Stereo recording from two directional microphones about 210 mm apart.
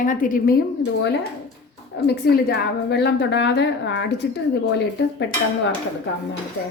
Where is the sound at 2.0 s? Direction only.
50° left (ahead or behind).